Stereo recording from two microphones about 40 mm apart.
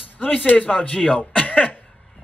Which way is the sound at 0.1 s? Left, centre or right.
Left.